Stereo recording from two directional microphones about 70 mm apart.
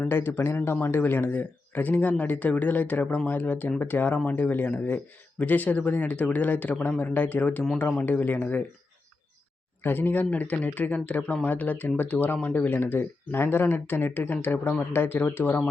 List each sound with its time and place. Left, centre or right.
0.0 s speech: left
9.8 s speech: left
12.4 s speech: centre
12.6 s speech: left